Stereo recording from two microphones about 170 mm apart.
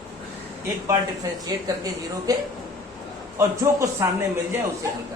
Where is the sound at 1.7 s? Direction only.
20° right (ahead or behind).